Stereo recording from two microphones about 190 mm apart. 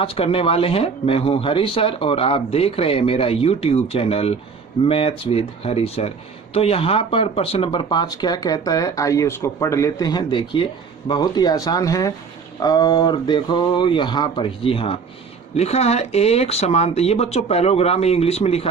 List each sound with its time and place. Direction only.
0.0 s speech: 30° left (ahead or behind)